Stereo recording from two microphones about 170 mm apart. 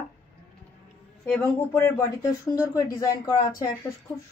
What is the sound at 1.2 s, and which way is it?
Speech, 15° left (ahead or behind).